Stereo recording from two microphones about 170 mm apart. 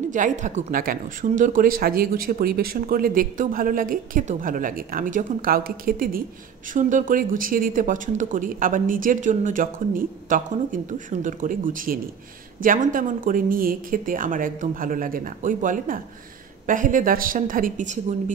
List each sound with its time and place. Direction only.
0.1 s speech: 50° right (ahead or behind)
6.7 s speech: 50° right (ahead or behind)